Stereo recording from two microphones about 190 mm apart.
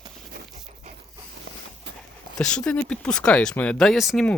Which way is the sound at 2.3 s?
5° left (ahead or behind).